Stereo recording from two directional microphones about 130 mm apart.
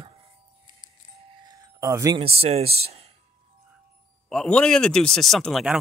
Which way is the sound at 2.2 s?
50° right (ahead or behind).